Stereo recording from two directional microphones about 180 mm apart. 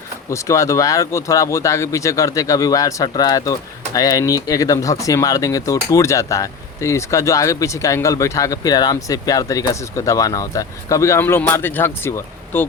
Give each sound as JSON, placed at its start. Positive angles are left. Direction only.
{"t": 0.3, "sound": "speech", "side_deg": 15}